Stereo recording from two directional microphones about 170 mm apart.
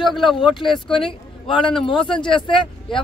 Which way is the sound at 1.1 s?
30° left (ahead or behind).